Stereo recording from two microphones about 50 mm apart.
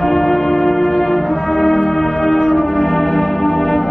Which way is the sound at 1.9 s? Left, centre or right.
Centre.